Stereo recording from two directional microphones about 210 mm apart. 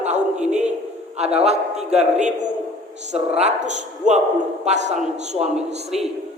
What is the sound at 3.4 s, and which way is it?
A woman's voice, 35° right (ahead or behind).